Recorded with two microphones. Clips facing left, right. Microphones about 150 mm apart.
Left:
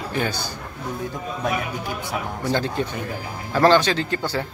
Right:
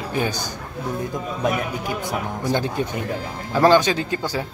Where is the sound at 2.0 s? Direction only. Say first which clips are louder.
Even; 15° right (ahead or behind).